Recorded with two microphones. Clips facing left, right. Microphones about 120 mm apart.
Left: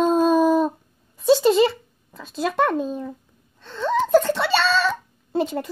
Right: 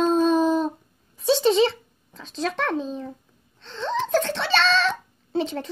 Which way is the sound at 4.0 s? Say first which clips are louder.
Left 6 dB; 5° left (ahead or behind).